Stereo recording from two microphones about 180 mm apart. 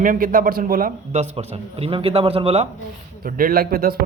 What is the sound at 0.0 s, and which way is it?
Speech, 50° right (ahead or behind).